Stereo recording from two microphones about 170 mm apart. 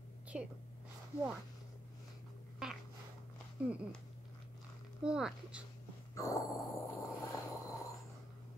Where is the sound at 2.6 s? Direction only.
5° right (ahead or behind).